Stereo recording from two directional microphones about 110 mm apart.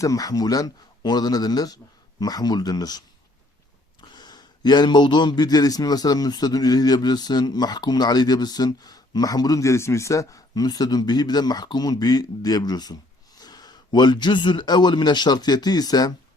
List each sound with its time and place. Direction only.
0.0 s a man's voice: 30° left (ahead or behind)
4.0 s a man's voice: 40° left (ahead or behind)